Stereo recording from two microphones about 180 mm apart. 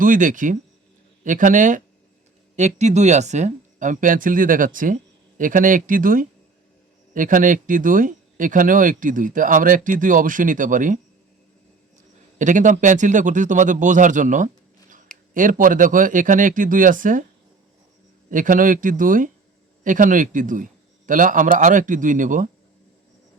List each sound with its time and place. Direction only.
0.0 s speech: 45° right (ahead or behind)
12.4 s speech: 45° right (ahead or behind)
18.3 s speech: 50° right (ahead or behind)